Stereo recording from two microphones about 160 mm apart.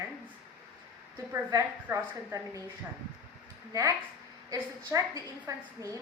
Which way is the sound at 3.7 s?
20° right (ahead or behind).